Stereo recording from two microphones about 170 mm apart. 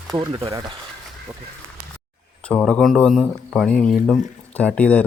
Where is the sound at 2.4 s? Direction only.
5° left (ahead or behind).